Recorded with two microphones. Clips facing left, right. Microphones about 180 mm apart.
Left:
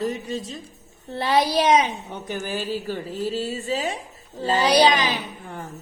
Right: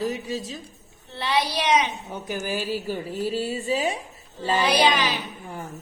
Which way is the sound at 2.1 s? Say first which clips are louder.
Even; 10° right (ahead or behind).